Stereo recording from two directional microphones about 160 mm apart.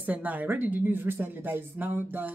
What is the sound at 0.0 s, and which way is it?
Speech, 10° right (ahead or behind).